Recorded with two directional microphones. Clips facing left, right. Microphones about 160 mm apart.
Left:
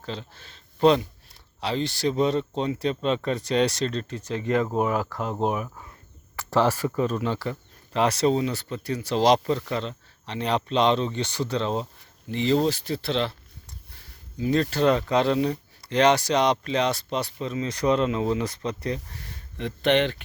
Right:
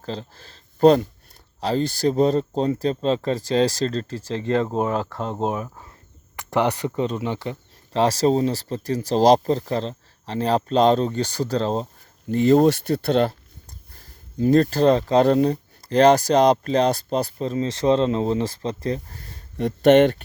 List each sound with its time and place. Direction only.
0.0 s speech: 35° right (ahead or behind)
6.3 s speech: 20° right (ahead or behind); by 11.9 s 40° right (ahead or behind)
12.3 s speech: 50° right (ahead or behind)